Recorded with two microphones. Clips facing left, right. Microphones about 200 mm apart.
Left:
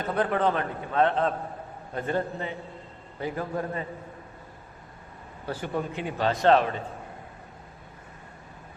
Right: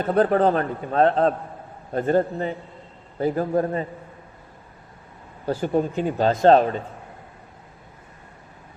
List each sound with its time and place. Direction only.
0.1 s a man's voice: 40° right (ahead or behind)
5.5 s a man's voice: 40° right (ahead or behind)